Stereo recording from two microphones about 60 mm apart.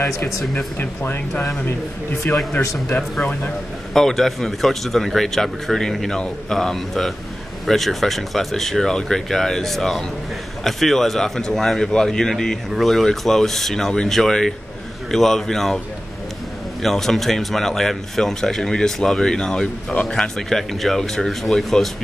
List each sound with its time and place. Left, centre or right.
0.7 s speech: left
3.9 s speech: centre
16.8 s speech: centre